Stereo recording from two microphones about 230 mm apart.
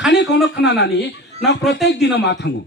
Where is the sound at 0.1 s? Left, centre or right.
Left.